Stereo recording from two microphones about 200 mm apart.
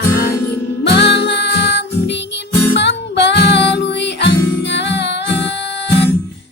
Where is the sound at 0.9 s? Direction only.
60° left (ahead or behind).